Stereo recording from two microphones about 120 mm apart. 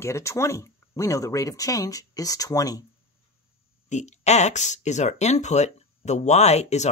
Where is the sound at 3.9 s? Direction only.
75° left (ahead or behind).